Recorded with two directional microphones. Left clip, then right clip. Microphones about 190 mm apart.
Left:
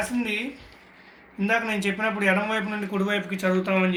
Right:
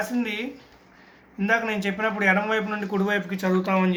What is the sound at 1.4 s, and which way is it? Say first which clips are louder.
A man's voice: right 1 dB; 45° right (ahead or behind).